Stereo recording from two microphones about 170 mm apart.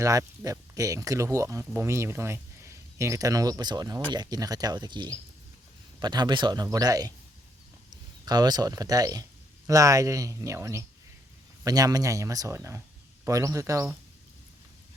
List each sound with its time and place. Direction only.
0.0 s speech: 20° right (ahead or behind)